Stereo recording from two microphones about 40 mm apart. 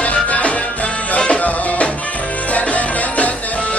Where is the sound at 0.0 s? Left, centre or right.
Left.